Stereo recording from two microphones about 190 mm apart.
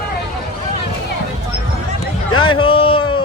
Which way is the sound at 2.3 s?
25° left (ahead or behind).